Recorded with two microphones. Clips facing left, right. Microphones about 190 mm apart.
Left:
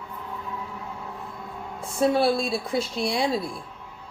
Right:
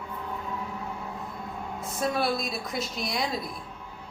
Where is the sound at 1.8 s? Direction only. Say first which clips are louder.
Left 7 dB; 30° left (ahead or behind).